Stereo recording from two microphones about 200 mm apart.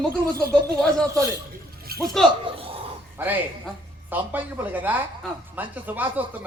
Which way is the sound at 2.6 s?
30° right (ahead or behind).